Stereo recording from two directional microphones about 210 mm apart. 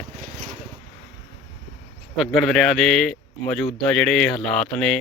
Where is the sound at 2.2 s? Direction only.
Centre (ahead or behind).